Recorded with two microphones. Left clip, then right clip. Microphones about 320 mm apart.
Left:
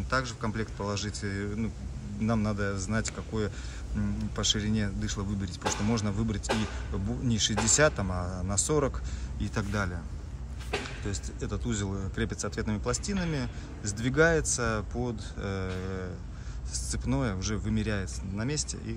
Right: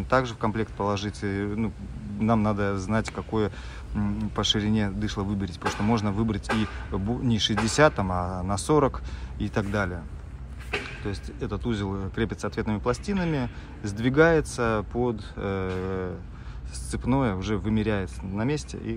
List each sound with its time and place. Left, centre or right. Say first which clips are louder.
0.1 s speech: right 7 dB; centre
10.7 s speech: right 3 dB; left
11.1 s speech: right 4 dB; centre